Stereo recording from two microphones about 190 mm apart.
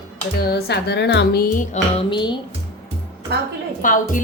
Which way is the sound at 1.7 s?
25° left (ahead or behind).